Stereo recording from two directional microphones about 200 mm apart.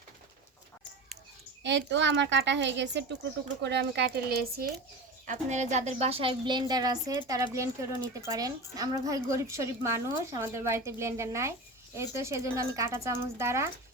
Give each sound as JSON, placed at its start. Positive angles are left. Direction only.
{"t": 1.6, "sound": "speech", "side_deg": -65}
{"t": 5.2, "sound": "a woman's voice", "side_deg": -40}